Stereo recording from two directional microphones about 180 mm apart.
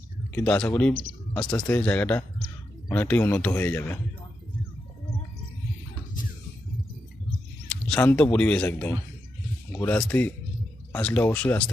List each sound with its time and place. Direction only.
0.3 s a man's voice: 5° left (ahead or behind)
7.7 s a man's voice: 5° left (ahead or behind)